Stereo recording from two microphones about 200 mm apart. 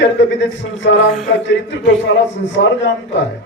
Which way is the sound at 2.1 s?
60° left (ahead or behind).